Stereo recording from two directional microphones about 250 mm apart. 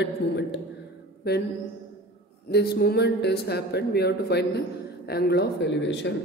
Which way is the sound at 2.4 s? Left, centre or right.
Left.